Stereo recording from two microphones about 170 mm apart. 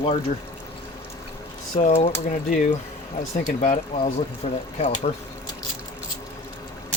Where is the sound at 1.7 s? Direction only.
40° left (ahead or behind).